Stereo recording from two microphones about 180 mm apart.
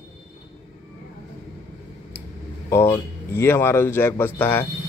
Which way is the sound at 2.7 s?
15° left (ahead or behind).